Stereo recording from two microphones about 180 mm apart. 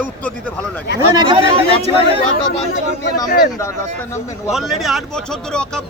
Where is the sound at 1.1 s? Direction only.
25° right (ahead or behind).